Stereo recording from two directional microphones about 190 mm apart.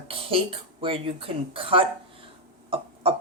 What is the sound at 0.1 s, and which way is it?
Speech, 30° right (ahead or behind).